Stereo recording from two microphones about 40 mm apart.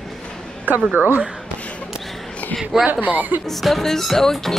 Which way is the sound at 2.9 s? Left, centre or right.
Right.